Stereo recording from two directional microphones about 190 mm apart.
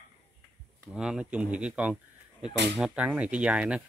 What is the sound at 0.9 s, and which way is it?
Livestock, 5° right (ahead or behind).